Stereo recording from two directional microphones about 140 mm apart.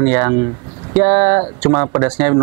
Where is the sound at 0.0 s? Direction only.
20° right (ahead or behind).